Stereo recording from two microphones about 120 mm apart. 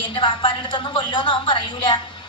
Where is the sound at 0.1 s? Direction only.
45° left (ahead or behind).